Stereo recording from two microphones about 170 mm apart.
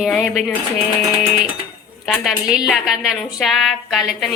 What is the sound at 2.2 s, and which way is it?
A woman's voice, centre (ahead or behind).